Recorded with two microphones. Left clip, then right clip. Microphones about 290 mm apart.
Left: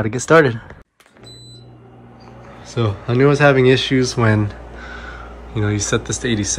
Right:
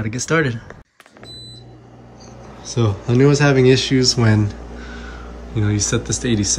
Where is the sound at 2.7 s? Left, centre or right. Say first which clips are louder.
Even; centre.